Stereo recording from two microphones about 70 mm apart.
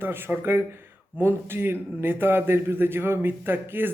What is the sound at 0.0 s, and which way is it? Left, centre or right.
A man's voice, right.